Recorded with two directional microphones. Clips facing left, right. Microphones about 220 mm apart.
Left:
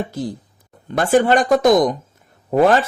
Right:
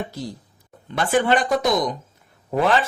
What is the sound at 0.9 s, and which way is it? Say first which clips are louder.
Speech: left 5 dB; 45° left (ahead or behind).